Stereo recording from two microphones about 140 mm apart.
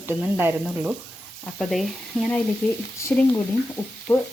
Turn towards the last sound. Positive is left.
turn(degrees=20)  # may be behind; listen again after turning